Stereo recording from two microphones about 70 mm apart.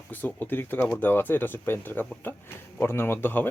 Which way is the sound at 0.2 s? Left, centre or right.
Left.